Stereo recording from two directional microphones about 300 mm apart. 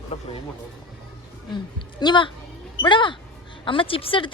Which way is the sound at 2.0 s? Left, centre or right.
Centre.